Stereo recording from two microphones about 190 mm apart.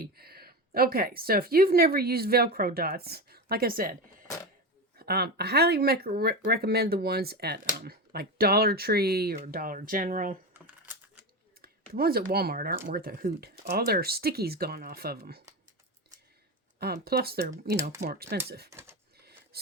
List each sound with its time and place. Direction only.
0.0 s speech: 55° right (ahead or behind)
4.9 s speech: 55° right (ahead or behind)
11.6 s speech: 50° right (ahead or behind)
16.8 s speech: 55° right (ahead or behind)
18.7 s speech: 15° right (ahead or behind)